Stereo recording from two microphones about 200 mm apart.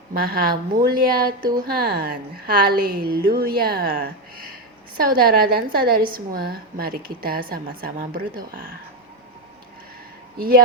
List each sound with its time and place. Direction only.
0.1 s a woman's voice: 50° right (ahead or behind)
10.3 s a man's voice: 45° right (ahead or behind)